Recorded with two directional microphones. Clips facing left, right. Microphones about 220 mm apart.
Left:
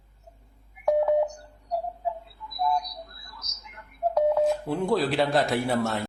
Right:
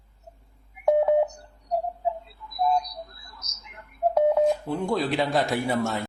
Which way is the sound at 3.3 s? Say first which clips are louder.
Even; 25° right (ahead or behind).